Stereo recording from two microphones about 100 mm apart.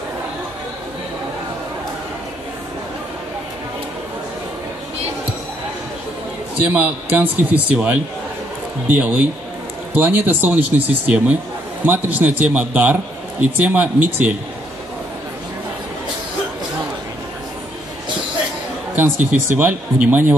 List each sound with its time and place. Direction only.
6.6 s a man's voice: 15° right (ahead or behind)
19.1 s speech: 20° right (ahead or behind)